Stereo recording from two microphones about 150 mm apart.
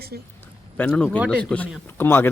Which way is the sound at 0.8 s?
10° left (ahead or behind).